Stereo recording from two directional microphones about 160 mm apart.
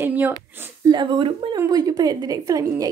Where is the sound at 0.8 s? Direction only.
30° right (ahead or behind).